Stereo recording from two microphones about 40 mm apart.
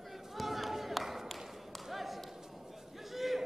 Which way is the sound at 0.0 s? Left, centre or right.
Centre.